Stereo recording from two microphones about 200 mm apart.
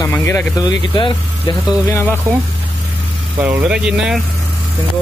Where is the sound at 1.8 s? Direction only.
10° left (ahead or behind).